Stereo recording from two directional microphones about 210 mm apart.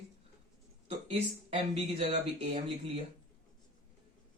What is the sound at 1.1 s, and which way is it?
Speech, 30° right (ahead or behind).